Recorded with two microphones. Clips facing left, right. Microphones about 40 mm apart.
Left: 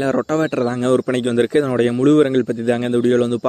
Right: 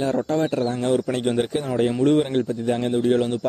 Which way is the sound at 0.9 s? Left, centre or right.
Left.